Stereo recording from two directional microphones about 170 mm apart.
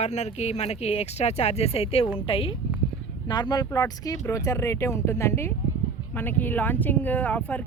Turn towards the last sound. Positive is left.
turn(degrees=10)  # may be behind; listen again after turning